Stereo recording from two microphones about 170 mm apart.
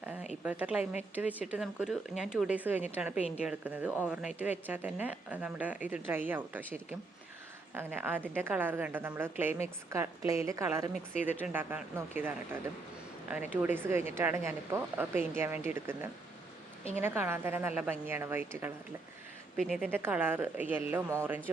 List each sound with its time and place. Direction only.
0.4 s speech: 10° right (ahead or behind)
3.2 s a woman's voice: 40° left (ahead or behind)
3.4 s speech: 10° right (ahead or behind)
13.5 s speech: 10° right (ahead or behind)
19.5 s speech: centre (ahead or behind)
19.9 s speech: 10° right (ahead or behind)